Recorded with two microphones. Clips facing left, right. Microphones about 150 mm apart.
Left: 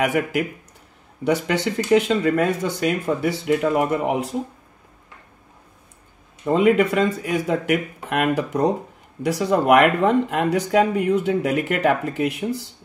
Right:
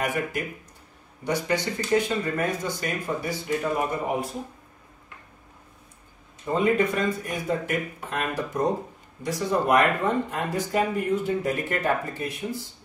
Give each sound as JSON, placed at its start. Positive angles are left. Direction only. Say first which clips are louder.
{"t": 0.0, "sound": "speech", "louder": "left 7 dB", "side_deg": 80}
{"t": 6.4, "sound": "speech", "louder": "left 6 dB", "side_deg": 85}